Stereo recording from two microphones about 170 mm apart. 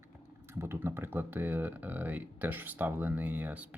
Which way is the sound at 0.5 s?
15° right (ahead or behind).